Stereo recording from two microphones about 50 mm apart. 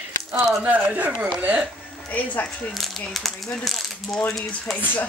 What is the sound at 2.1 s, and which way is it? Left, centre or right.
Speech, left.